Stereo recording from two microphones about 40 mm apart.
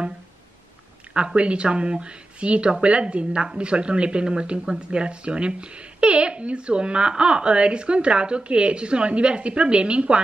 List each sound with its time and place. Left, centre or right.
1.1 s speech: right